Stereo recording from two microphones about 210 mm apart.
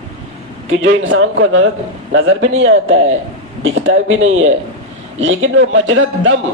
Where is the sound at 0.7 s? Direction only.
70° right (ahead or behind).